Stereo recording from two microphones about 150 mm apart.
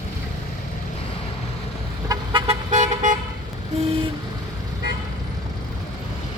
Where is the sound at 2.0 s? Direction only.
30° right (ahead or behind).